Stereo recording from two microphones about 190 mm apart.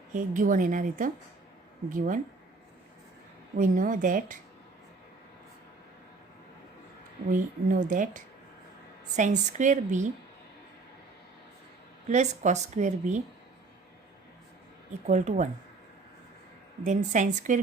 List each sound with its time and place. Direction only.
0.1 s a woman's voice: 45° right (ahead or behind)
3.6 s a woman's voice: 45° right (ahead or behind)
7.3 s a woman's voice: 45° right (ahead or behind)
12.0 s speech: 40° right (ahead or behind)
15.0 s speech: 40° right (ahead or behind)
16.8 s speech: 40° right (ahead or behind)